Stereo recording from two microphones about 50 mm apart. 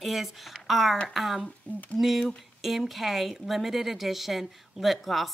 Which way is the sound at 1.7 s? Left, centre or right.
Left.